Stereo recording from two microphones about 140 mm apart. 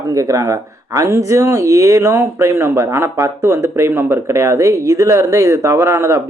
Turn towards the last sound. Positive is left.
turn(degrees=-20)  # may be behind; listen again after turning